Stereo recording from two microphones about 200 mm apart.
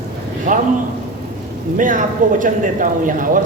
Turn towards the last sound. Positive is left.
turn(degrees=-40)  # may be behind; listen again after turning